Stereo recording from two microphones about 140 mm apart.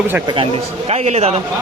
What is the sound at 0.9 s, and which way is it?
Speech, 50° right (ahead or behind).